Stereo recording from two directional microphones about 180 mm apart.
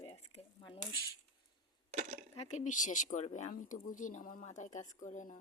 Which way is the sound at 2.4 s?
40° left (ahead or behind).